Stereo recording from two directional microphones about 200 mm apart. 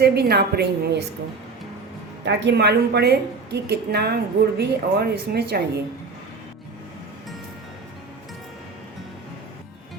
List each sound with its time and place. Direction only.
0.0 s a woman's voice: 55° right (ahead or behind)
2.2 s a woman's voice: 60° right (ahead or behind)